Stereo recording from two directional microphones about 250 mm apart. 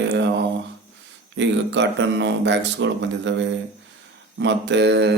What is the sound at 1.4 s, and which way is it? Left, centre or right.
Speech, right.